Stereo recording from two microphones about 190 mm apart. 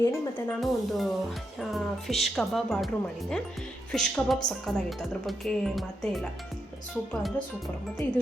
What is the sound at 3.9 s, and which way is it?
Speech, 5° left (ahead or behind).